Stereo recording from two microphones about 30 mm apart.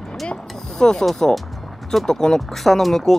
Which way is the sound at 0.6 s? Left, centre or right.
Centre.